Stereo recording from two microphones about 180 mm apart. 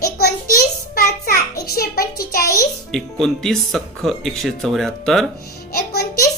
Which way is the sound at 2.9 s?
Centre (ahead or behind).